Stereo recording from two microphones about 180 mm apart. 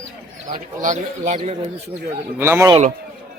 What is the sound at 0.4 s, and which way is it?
Speech, 45° right (ahead or behind).